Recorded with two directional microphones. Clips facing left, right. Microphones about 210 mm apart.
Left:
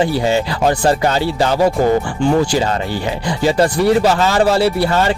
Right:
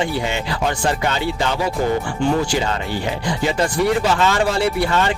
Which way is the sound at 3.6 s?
40° left (ahead or behind).